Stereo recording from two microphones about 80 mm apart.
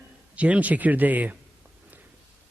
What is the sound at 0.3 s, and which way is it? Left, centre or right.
Speech, centre.